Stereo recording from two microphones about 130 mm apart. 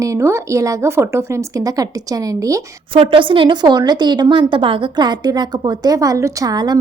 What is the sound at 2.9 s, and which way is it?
A woman's voice, 40° right (ahead or behind).